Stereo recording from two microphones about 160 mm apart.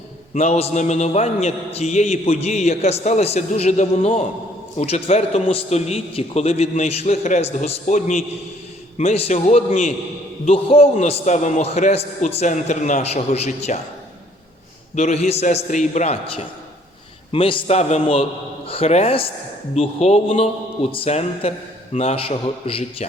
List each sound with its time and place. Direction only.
0.3 s a man's voice: 45° left (ahead or behind)
14.9 s a man's voice: 45° left (ahead or behind)
17.3 s a man's voice: 35° left (ahead or behind)